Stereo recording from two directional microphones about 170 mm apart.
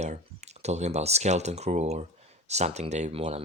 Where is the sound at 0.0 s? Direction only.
40° right (ahead or behind).